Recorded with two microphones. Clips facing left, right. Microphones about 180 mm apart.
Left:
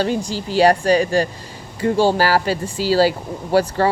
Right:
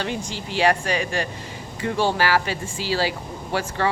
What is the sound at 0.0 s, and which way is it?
Speech, 35° left (ahead or behind).